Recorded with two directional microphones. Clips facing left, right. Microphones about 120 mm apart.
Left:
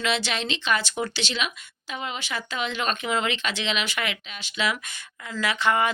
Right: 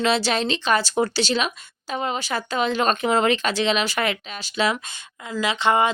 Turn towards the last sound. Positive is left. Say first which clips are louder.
# right 4 dB
turn(degrees=-25)  # may be behind; listen again after turning